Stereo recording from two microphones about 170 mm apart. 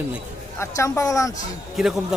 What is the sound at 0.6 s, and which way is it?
Speech, 15° left (ahead or behind).